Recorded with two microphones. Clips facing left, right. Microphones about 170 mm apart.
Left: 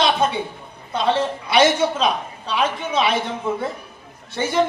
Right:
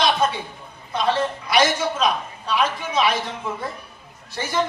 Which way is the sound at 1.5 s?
30° left (ahead or behind).